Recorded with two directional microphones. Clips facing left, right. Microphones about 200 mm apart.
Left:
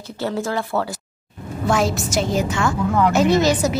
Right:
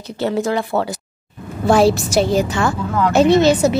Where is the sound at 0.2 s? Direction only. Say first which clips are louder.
Right 4 dB; 20° right (ahead or behind).